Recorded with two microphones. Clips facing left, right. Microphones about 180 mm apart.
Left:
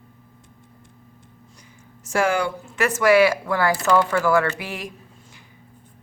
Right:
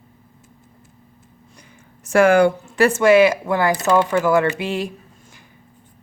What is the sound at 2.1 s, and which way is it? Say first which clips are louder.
Speech: right 8 dB; 60° right (ahead or behind).